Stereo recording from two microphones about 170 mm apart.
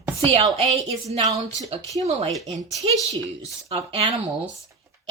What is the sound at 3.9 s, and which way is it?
Speech, 35° right (ahead or behind).